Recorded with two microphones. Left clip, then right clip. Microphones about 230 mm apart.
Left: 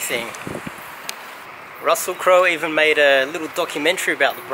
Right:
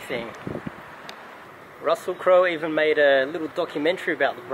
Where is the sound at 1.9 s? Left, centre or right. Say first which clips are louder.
Left 4 dB; centre.